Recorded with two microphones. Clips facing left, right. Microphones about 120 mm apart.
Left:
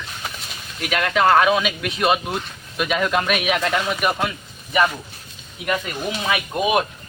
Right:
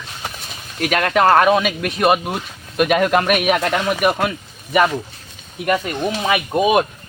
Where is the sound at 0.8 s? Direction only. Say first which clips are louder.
Right 4 dB; 50° right (ahead or behind).